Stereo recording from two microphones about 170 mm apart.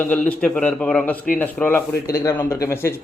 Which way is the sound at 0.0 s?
10° left (ahead or behind).